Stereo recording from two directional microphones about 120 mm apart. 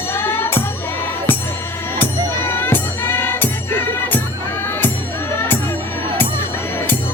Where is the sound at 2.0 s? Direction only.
15° left (ahead or behind).